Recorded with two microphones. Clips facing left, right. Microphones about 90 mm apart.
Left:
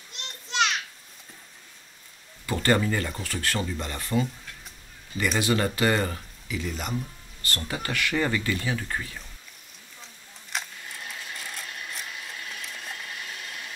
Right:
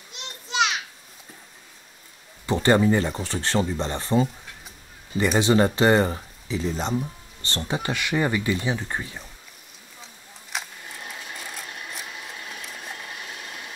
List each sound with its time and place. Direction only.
0.1 s children playing: 5° right (ahead or behind)
2.4 s speech: 20° right (ahead or behind)
5.4 s speech: 25° right (ahead or behind)
10.5 s sewing machine: 5° right (ahead or behind)
12.2 s a sound: 25° right (ahead or behind)